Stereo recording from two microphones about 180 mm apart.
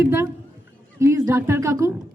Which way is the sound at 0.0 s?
15° right (ahead or behind).